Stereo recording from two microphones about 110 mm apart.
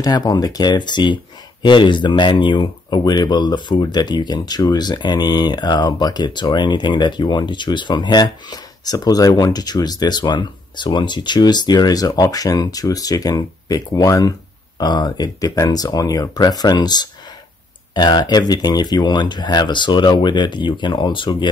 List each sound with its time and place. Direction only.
0.0 s speech: 35° left (ahead or behind)